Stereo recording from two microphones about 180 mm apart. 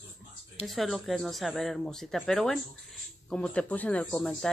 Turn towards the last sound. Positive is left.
turn(degrees=5)  # may be behind; listen again after turning